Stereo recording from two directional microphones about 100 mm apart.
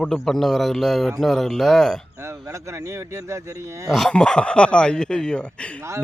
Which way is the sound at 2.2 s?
30° right (ahead or behind).